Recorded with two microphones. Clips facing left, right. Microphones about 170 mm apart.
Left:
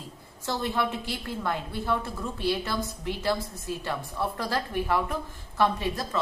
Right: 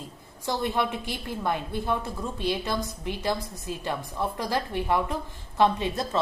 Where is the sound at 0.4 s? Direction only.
15° right (ahead or behind).